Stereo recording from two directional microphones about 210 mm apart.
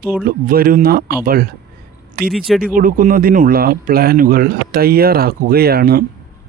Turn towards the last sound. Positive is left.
turn(degrees=-45)  # may be behind; listen again after turning